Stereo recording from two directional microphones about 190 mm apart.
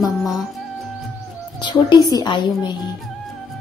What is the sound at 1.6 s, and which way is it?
A woman's voice, 25° left (ahead or behind).